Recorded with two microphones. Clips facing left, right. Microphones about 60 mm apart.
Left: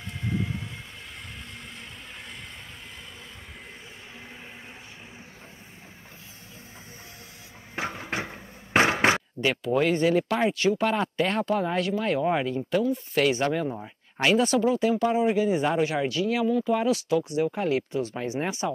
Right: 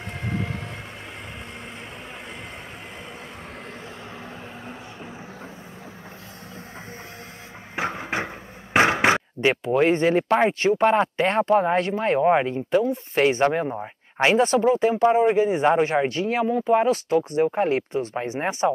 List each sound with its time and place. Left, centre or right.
0.3 s vehicle: right
7.8 s a sound: right
9.1 s speech: right